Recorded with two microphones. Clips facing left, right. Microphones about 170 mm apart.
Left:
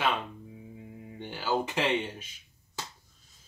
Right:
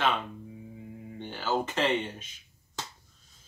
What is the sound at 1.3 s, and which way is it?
Speech, 10° left (ahead or behind).